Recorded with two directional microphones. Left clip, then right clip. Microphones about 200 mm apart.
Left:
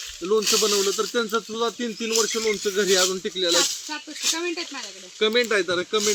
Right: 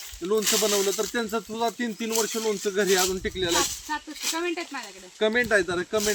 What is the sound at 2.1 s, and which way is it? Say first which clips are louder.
Speech: left 4 dB; 10° right (ahead or behind).